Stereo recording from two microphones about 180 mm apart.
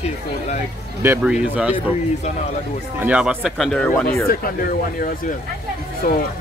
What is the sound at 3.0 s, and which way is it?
Speech, 5° right (ahead or behind).